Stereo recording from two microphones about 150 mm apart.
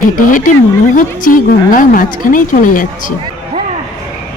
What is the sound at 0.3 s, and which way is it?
Speech, 65° left (ahead or behind).